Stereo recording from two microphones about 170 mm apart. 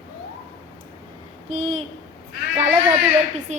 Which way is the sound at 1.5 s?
40° right (ahead or behind).